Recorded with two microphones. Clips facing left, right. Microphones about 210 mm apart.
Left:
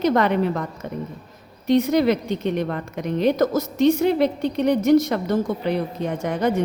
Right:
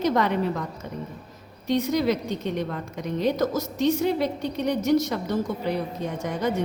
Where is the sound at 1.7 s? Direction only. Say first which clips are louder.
Left 5 dB; 60° left (ahead or behind).